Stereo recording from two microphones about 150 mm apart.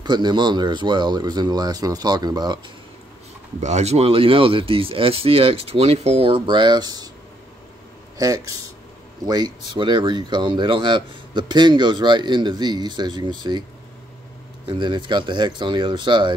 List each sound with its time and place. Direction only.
0.0 s speech: 30° right (ahead or behind)
3.6 s speech: 50° right (ahead or behind); by 7.1 s 25° right (ahead or behind)
8.2 s speech: 25° right (ahead or behind)
14.7 s speech: 30° right (ahead or behind)